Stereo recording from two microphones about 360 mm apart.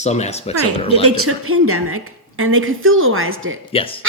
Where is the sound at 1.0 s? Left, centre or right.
Right.